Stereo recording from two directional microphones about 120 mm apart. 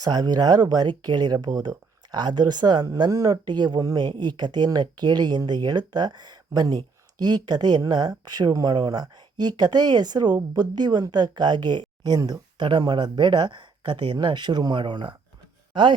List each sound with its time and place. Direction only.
0.0 s speech: 35° right (ahead or behind)